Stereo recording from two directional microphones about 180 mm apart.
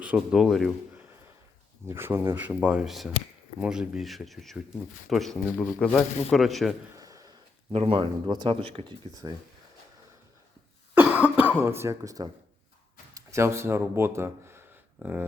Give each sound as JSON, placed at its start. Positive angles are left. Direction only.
{"t": 0.0, "sound": "speech", "side_deg": -5}
{"t": 1.9, "sound": "speech", "side_deg": -15}
{"t": 6.9, "sound": "a sound", "side_deg": -20}
{"t": 7.7, "sound": "speech", "side_deg": -30}
{"t": 10.9, "sound": "cough", "side_deg": -10}
{"t": 11.6, "sound": "speech", "side_deg": -15}